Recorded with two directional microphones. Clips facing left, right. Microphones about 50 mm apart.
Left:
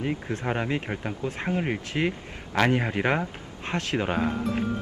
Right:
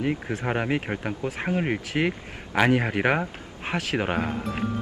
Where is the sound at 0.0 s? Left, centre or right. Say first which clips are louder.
Right 2 dB; centre.